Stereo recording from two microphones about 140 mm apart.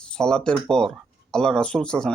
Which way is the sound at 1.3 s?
5° left (ahead or behind).